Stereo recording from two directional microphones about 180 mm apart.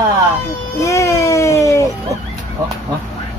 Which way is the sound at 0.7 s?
15° left (ahead or behind).